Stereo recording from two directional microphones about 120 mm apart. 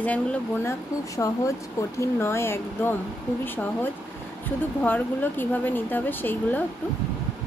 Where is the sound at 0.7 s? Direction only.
25° left (ahead or behind).